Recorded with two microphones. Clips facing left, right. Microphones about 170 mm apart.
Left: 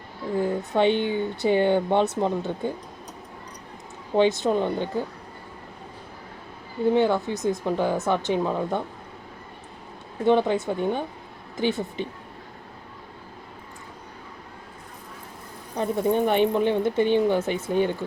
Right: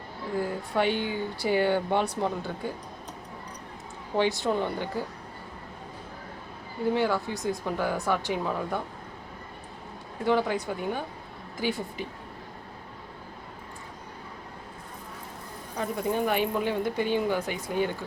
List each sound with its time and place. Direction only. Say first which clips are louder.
0.7 s speech: left 5 dB; 20° left (ahead or behind)
4.2 s speech: left 5 dB; 20° left (ahead or behind)
6.9 s speech: left 5 dB; 20° left (ahead or behind)
10.2 s speech: left 5 dB; 25° left (ahead or behind)
15.7 s speech: left 6 dB; 25° left (ahead or behind)